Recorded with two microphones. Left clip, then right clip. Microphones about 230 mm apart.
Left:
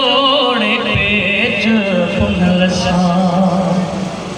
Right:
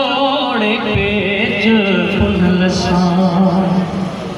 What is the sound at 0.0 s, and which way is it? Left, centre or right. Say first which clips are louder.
Music: left 3 dB; left.